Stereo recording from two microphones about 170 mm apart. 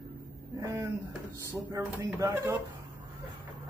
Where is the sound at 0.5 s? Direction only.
15° right (ahead or behind).